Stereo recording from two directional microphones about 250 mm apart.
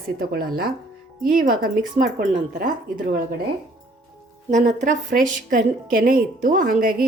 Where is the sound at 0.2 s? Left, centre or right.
Right.